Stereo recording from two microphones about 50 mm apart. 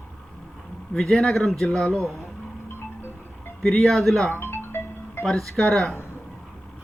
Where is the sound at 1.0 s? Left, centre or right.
Centre.